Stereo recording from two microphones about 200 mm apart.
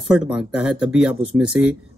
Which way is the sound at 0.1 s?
5° right (ahead or behind).